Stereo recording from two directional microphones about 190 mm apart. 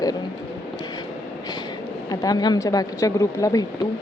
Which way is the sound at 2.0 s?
20° left (ahead or behind).